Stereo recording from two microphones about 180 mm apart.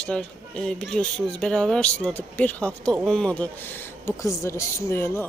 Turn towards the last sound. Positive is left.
turn(degrees=15)  # may be behind; listen again after turning